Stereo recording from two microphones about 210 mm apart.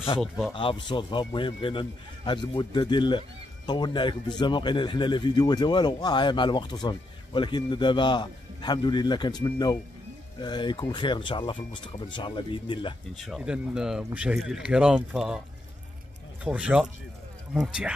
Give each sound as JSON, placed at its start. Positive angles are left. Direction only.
{"t": 0.6, "sound": "speech", "side_deg": 25}
{"t": 13.2, "sound": "speech", "side_deg": 0}
{"t": 16.4, "sound": "speech", "side_deg": -5}